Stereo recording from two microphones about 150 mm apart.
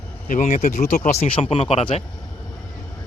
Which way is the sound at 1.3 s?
40° left (ahead or behind).